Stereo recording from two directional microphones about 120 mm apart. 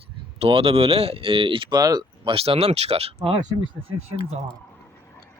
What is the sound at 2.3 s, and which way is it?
Speech, 50° right (ahead or behind).